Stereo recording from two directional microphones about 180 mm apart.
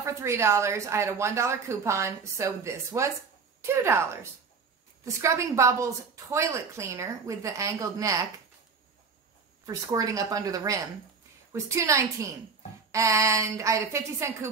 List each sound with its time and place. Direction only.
0.0 s a woman's voice: 15° right (ahead or behind)
9.7 s a woman's voice: 20° right (ahead or behind)